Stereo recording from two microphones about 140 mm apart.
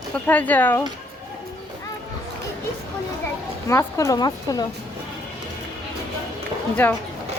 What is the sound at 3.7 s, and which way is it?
Speech, 20° left (ahead or behind).